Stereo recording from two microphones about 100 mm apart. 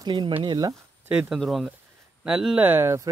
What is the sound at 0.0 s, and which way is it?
Speech, 45° right (ahead or behind).